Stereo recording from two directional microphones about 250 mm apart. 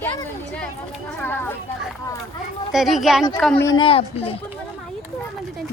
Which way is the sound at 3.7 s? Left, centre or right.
Left.